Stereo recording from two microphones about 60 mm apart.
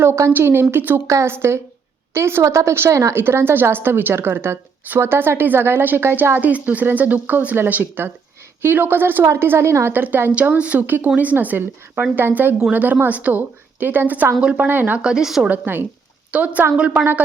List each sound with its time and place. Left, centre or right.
0.0 s a woman's voice: right
0.3 s a woman's voice: right
1.0 s speech: right
1.3 s a woman's voice: right
3.2 s a woman's voice: right
9.9 s a woman's voice: right
10.3 s a woman's voice: right
14.4 s speech: centre
14.7 s a woman's voice: right
15.0 s speech: centre
15.4 s a woman's voice: right
16.3 s a woman's voice: right